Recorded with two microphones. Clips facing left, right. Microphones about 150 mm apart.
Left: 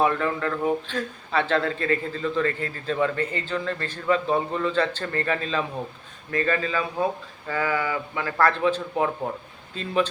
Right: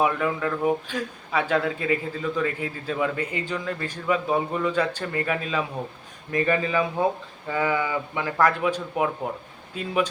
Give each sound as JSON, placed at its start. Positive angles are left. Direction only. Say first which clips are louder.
{"t": 0.0, "sound": "speech", "louder": "even", "side_deg": -5}